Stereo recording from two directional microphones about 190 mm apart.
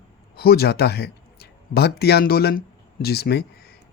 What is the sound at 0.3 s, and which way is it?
A woman's voice, 55° left (ahead or behind).